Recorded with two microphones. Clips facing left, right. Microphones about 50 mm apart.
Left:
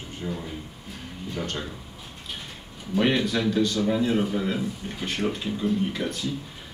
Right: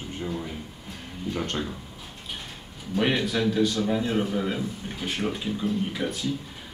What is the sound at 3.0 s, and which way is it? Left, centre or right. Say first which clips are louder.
Speech: left 1 dB; centre.